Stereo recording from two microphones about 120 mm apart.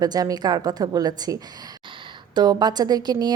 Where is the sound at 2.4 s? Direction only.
35° right (ahead or behind).